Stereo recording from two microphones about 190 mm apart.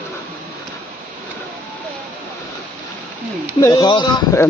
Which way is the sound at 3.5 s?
20° left (ahead or behind).